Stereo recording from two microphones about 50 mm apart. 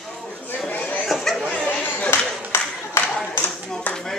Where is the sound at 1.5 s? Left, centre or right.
Centre.